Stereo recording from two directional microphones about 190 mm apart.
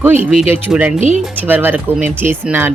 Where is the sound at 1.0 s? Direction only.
40° right (ahead or behind).